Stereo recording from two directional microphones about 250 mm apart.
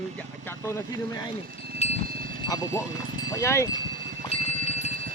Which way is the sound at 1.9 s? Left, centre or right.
Right.